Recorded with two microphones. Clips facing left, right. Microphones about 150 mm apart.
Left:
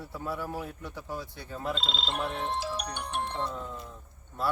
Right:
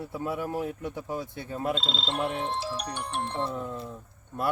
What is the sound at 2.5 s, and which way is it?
Speech, centre (ahead or behind).